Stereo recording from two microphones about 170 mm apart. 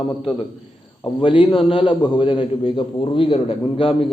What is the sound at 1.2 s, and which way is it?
A man's voice, 30° left (ahead or behind).